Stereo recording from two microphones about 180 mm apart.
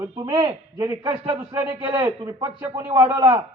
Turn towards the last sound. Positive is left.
turn(degrees=-20)  # may be behind; listen again after turning